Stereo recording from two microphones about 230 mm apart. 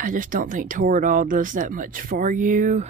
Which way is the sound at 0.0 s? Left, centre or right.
Right.